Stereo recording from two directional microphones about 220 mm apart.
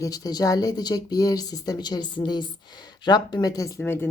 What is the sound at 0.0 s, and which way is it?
Speech, 15° left (ahead or behind).